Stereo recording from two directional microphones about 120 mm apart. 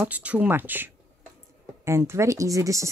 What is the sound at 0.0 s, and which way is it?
Speech, 10° right (ahead or behind).